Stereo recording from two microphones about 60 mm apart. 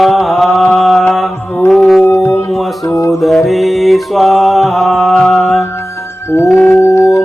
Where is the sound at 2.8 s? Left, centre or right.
Left.